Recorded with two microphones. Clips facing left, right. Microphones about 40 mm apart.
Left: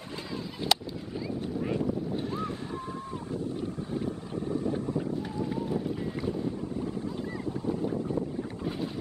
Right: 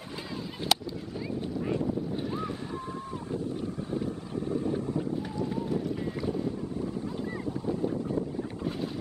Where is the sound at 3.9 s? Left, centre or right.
Left.